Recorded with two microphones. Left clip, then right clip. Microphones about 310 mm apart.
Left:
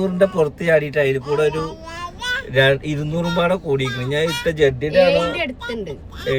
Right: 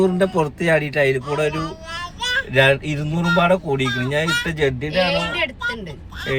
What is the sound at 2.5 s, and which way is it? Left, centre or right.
Speech, centre.